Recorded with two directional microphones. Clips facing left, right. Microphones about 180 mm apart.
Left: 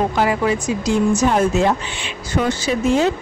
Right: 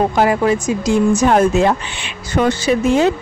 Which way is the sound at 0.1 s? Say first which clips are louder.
Right 4 dB; 50° right (ahead or behind).